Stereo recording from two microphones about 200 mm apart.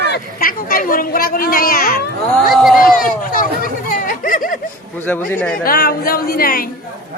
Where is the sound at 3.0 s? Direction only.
45° left (ahead or behind).